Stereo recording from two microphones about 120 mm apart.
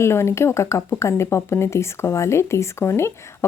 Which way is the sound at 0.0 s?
20° left (ahead or behind).